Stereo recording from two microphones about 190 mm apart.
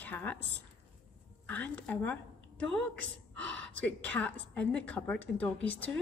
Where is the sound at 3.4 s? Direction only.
80° right.